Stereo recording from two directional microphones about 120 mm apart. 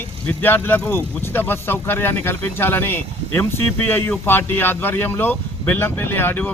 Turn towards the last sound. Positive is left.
turn(degrees=15)  # may be behind; listen again after turning